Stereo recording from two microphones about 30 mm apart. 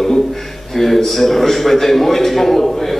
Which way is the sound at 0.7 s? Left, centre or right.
Centre.